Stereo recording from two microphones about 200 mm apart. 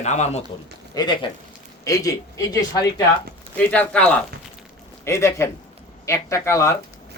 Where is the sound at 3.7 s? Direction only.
5° left (ahead or behind).